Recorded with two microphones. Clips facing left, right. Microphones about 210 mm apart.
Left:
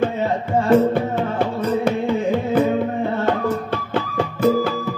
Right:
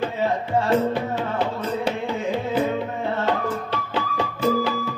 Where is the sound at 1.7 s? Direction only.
50° left (ahead or behind).